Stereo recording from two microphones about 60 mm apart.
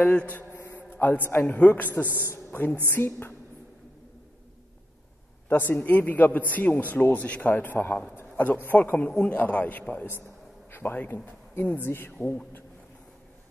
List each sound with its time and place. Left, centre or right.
0.0 s a man's voice: left
5.5 s a man's voice: left